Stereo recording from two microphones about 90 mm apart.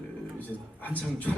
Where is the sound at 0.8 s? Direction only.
20° left (ahead or behind).